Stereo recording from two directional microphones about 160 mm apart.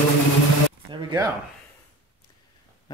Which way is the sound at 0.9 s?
25° right (ahead or behind).